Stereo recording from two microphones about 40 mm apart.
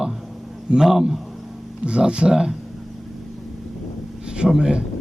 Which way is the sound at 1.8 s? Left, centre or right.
Right.